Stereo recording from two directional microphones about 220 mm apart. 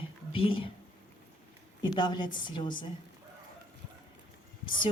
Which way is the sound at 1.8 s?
20° left (ahead or behind).